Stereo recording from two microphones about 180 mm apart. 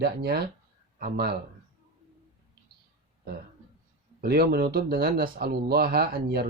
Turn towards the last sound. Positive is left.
turn(degrees=-60)  # may be behind; listen again after turning